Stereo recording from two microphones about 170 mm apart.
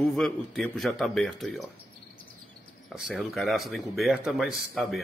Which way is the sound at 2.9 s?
5° right (ahead or behind).